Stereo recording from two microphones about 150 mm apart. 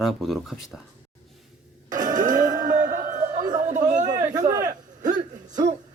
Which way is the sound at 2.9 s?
55° right (ahead or behind).